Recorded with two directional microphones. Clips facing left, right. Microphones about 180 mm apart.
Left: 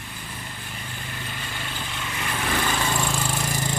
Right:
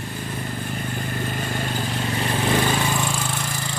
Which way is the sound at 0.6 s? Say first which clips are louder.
Right 10 dB; 45° right (ahead or behind).